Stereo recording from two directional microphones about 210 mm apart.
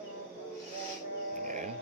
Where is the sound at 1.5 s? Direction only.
35° right (ahead or behind).